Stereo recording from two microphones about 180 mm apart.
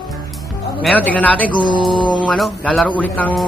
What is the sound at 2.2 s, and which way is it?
A man's voice, 5° left (ahead or behind).